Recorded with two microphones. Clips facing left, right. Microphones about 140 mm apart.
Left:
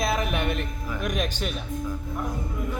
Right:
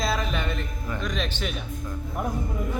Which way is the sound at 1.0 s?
50° left (ahead or behind).